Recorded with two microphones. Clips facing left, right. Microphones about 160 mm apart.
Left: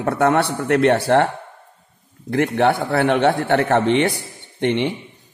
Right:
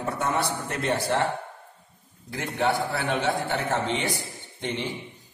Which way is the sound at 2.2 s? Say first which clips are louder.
Left 9 dB; 70° left (ahead or behind).